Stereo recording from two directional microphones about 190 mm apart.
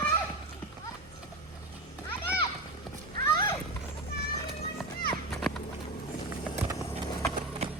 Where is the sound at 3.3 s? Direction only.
25° left (ahead or behind).